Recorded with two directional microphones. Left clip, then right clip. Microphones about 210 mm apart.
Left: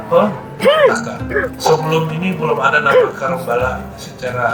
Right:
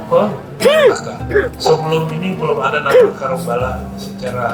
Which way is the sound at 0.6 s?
65° right (ahead or behind).